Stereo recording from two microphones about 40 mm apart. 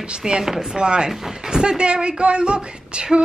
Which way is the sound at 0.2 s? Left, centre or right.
Centre.